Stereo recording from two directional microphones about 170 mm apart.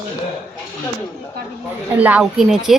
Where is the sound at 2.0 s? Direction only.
10° right (ahead or behind).